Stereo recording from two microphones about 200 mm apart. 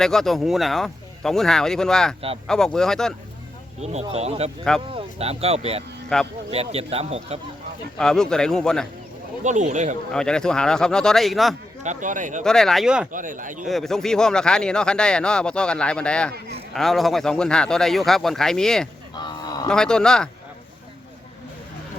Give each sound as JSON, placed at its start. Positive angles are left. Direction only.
{"t": 0.0, "sound": "speech", "side_deg": 0}
{"t": 4.1, "sound": "speech", "side_deg": -30}
{"t": 6.1, "sound": "speech", "side_deg": 5}
{"t": 6.5, "sound": "speech", "side_deg": -30}
{"t": 7.9, "sound": "speech", "side_deg": 5}
{"t": 9.4, "sound": "speech", "side_deg": -35}
{"t": 10.1, "sound": "speech", "side_deg": 5}
{"t": 11.8, "sound": "speech", "side_deg": -40}
{"t": 12.4, "sound": "speech", "side_deg": 0}
{"t": 13.1, "sound": "speech", "side_deg": -40}
{"t": 13.7, "sound": "speech", "side_deg": 0}
{"t": 19.1, "sound": "cattle", "side_deg": 20}
{"t": 19.6, "sound": "speech", "side_deg": 5}